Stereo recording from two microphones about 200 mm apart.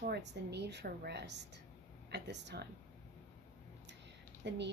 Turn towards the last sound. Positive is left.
turn(degrees=-60)  # may be behind; listen again after turning